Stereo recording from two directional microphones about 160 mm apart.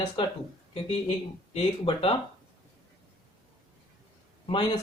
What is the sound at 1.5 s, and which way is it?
Speech, 35° left (ahead or behind).